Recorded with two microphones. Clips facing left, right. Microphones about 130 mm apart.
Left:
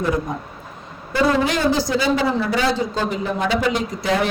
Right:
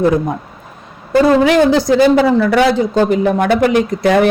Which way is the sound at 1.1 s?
45° right (ahead or behind).